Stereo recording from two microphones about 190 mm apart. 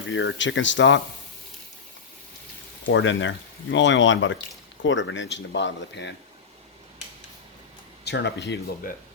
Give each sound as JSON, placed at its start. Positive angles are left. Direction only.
{"t": 0.1, "sound": "speech", "side_deg": 75}
{"t": 2.8, "sound": "speech", "side_deg": 75}
{"t": 8.0, "sound": "speech", "side_deg": 65}